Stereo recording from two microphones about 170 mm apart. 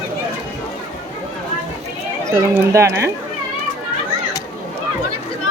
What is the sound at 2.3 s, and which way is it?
Speech, 15° right (ahead or behind).